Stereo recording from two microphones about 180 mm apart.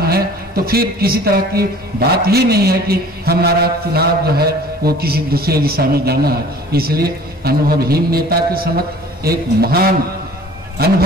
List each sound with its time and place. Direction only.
0.0 s a man's voice: 60° right (ahead or behind)